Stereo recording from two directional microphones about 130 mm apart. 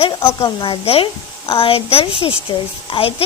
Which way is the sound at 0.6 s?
45° left (ahead or behind).